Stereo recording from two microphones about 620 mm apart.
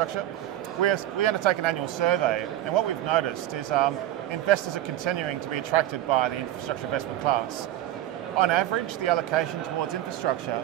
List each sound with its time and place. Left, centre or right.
0.8 s a man's voice: right